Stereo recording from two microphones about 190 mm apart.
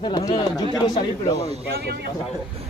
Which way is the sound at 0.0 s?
25° left (ahead or behind).